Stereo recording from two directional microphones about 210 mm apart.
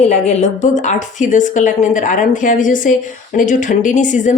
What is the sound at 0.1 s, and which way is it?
Speech, 30° left (ahead or behind).